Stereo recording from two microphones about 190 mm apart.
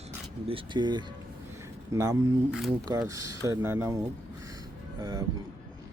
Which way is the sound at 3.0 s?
15° right (ahead or behind).